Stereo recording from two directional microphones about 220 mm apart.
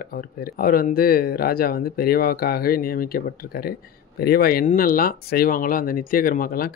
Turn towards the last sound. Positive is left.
turn(degrees=40)  # may be behind; listen again after turning